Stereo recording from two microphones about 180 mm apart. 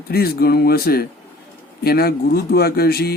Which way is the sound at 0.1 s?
60° left (ahead or behind).